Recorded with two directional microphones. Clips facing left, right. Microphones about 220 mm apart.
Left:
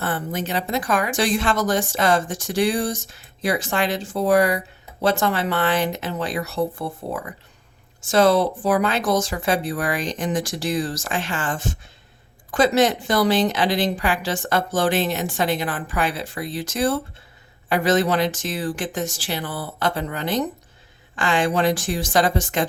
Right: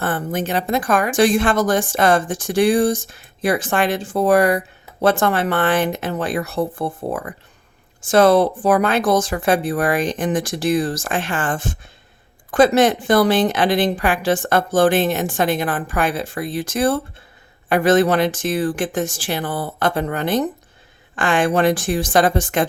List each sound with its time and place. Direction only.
0.0 s a woman's voice: 50° right (ahead or behind)